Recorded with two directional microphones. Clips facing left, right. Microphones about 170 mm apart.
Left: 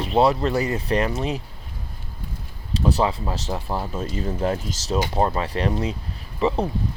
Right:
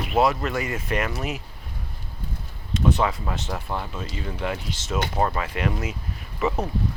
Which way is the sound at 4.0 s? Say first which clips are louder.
Left 5 dB; 40° left (ahead or behind).